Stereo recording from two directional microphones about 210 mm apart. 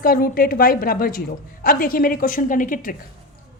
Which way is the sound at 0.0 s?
45° left (ahead or behind).